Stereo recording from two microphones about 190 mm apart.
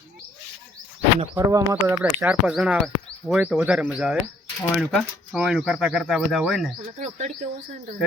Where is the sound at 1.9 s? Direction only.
5° right (ahead or behind).